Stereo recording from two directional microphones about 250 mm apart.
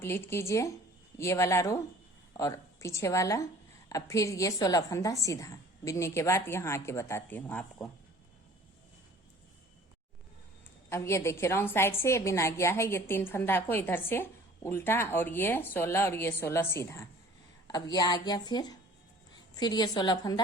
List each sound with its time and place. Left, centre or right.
0.0 s a woman's voice: centre
10.8 s a woman's voice: centre